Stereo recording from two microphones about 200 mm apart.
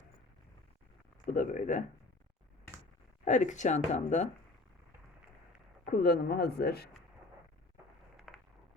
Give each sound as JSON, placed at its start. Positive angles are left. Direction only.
{"t": 1.3, "sound": "speech", "side_deg": 40}
{"t": 3.2, "sound": "speech", "side_deg": 40}
{"t": 5.8, "sound": "speech", "side_deg": 45}
{"t": 8.1, "sound": "a sound", "side_deg": 0}